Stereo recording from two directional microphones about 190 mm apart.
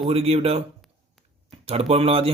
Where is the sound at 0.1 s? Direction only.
30° right (ahead or behind).